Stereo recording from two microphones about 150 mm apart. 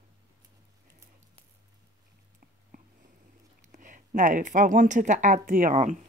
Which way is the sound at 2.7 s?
65° right (ahead or behind).